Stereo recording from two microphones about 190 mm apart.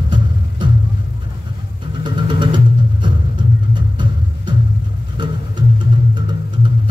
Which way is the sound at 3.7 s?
25° right (ahead or behind).